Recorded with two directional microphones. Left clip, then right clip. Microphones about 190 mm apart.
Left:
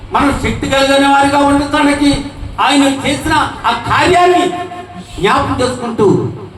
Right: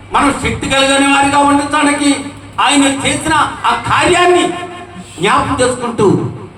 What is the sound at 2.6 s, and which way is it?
A man's voice, 30° right (ahead or behind).